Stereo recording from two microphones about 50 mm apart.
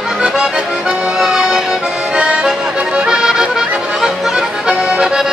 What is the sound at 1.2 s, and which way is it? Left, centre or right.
Accordion, centre.